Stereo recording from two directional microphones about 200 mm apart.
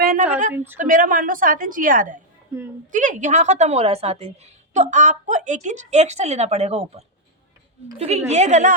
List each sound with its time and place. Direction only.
0.0 s a sound: 45° right (ahead or behind)
0.5 s a woman's voice: 10° right (ahead or behind)
0.8 s a woman's voice: 40° right (ahead or behind)
2.5 s a woman's voice: 15° right (ahead or behind)
2.9 s a woman's voice: 40° right (ahead or behind)